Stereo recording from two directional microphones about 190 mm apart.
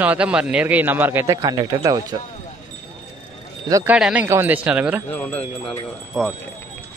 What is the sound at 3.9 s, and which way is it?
A man's voice, 5° right (ahead or behind).